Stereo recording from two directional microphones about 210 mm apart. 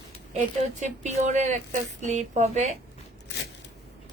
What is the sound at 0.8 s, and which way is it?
Speech, 35° right (ahead or behind).